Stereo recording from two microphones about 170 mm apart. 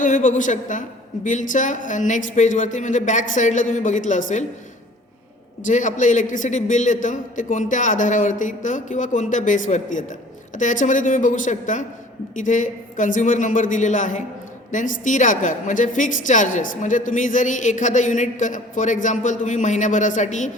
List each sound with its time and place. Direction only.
0.0 s a man's voice: 50° left (ahead or behind)
5.6 s a man's voice: 45° left (ahead or behind)